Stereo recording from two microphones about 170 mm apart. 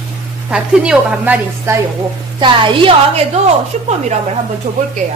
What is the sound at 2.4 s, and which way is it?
A woman's voice, 30° right (ahead or behind).